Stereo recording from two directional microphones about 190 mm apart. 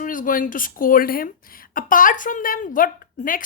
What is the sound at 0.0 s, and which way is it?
Speech, 45° left (ahead or behind).